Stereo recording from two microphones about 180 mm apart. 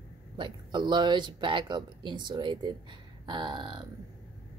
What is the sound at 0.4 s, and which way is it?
A woman's voice, 25° right (ahead or behind).